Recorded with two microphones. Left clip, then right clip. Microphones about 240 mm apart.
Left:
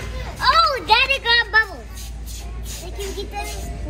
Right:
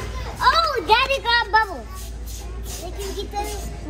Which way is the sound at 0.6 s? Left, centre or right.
Centre.